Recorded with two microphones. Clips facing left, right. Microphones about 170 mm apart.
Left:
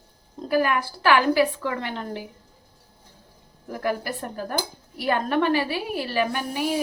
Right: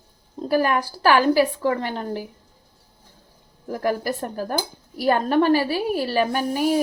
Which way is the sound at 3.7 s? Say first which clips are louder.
Right 3 dB; 40° right (ahead or behind).